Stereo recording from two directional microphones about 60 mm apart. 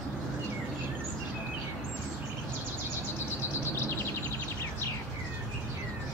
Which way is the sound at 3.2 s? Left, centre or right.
Left.